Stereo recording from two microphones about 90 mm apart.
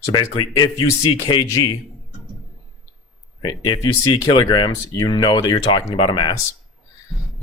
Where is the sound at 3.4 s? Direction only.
60° left (ahead or behind).